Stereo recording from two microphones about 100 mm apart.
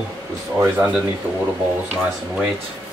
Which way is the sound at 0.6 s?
20° right (ahead or behind).